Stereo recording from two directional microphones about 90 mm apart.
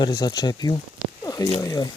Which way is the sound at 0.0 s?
50° left (ahead or behind).